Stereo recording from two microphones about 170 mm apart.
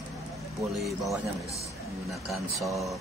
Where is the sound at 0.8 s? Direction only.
Centre (ahead or behind).